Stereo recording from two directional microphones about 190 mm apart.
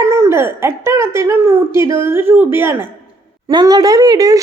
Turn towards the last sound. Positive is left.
turn(degrees=-20)  # may be behind; listen again after turning